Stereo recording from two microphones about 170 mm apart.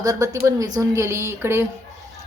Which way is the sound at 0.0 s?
20° right (ahead or behind).